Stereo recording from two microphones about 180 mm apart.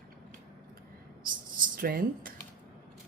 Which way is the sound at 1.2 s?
50° right (ahead or behind).